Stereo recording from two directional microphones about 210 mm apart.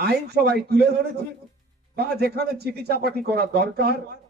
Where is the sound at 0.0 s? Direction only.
50° right (ahead or behind).